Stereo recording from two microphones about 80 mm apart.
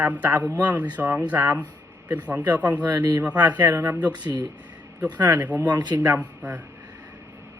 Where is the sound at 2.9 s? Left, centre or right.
Right.